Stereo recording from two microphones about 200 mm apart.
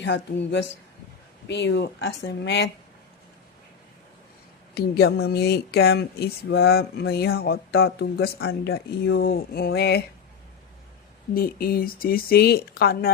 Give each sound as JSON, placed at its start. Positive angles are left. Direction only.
{"t": 0.0, "sound": "speech", "side_deg": 60}
{"t": 4.7, "sound": "speech", "side_deg": 50}
{"t": 11.3, "sound": "speech", "side_deg": 45}